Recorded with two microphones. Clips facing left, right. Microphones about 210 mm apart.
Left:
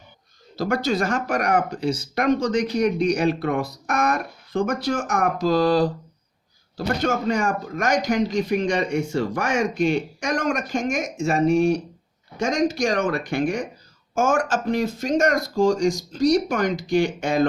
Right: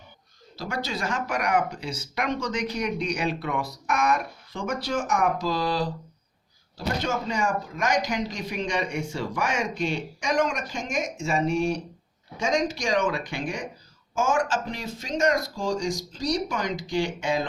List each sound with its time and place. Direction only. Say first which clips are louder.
0.5 s speech: left 9 dB; 50° left (ahead or behind)
12.9 s speech: left 3 dB; 55° left (ahead or behind)